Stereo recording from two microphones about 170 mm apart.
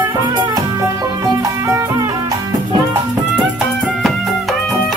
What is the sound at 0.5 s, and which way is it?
Music, 20° right (ahead or behind).